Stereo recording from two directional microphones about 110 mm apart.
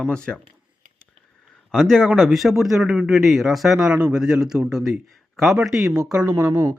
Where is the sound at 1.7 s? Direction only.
5° left (ahead or behind).